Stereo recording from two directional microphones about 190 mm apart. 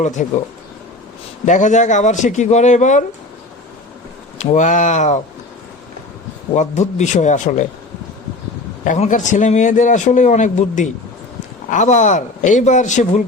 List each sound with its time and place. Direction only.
0.2 s speech: 40° left (ahead or behind)
1.5 s a man's voice: 40° left (ahead or behind)
4.4 s a man's voice: 40° left (ahead or behind)
6.5 s a man's voice: 40° left (ahead or behind)
8.8 s a man's voice: 40° left (ahead or behind)